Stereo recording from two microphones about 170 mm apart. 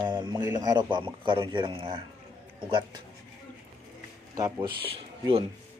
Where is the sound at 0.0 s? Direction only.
25° right (ahead or behind).